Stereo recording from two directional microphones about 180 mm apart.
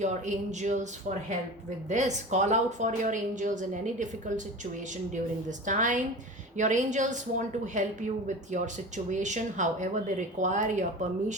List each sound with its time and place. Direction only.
0.0 s speech: 40° right (ahead or behind)
1.9 s a woman's voice: 40° right (ahead or behind)
5.5 s a woman's voice: 45° right (ahead or behind)